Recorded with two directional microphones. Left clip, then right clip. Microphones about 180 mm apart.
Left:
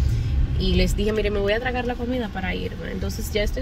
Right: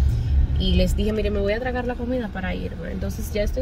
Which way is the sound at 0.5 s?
10° right (ahead or behind).